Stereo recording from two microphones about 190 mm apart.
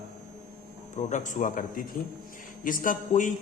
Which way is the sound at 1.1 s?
40° left (ahead or behind).